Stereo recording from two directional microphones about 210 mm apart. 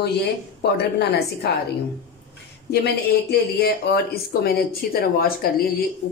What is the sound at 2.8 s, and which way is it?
A woman's voice, 50° left (ahead or behind).